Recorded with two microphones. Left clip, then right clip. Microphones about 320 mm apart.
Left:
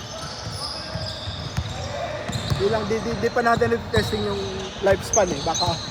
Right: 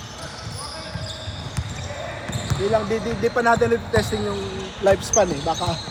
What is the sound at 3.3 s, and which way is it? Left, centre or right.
Speech, right.